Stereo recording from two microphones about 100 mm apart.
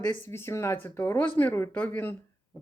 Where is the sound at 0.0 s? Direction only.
20° left (ahead or behind).